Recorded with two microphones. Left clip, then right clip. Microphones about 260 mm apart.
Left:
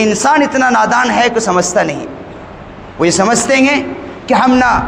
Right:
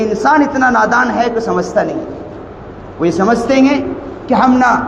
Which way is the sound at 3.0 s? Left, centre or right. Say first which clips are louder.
Left 1 dB; left.